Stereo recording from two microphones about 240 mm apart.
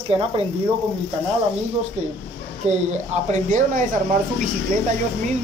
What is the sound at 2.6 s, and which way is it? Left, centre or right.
Speech, right.